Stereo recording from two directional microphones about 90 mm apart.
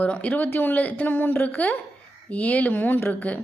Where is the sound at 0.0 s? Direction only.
15° left (ahead or behind).